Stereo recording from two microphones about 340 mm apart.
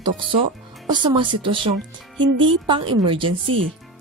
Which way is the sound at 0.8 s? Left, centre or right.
Centre.